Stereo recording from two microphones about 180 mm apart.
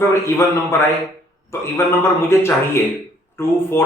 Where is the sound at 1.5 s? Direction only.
15° left (ahead or behind).